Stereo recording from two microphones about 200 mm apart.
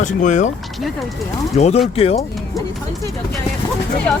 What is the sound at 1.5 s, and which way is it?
Speech, 35° left (ahead or behind).